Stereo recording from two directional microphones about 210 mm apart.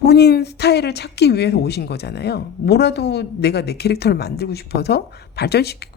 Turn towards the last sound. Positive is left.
turn(degrees=50)  # may be behind; listen again after turning